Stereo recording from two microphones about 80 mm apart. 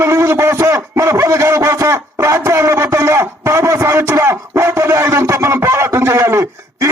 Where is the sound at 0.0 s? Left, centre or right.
Right.